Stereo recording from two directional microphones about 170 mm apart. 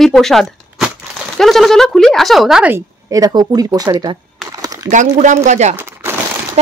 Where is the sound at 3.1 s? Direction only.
20° right (ahead or behind).